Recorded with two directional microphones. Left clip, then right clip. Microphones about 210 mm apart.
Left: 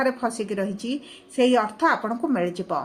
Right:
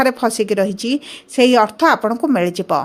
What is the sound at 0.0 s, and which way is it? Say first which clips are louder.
Speech: right 8 dB; 50° right (ahead or behind).